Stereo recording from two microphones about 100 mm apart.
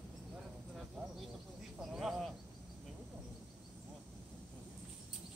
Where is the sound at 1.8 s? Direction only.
Centre (ahead or behind).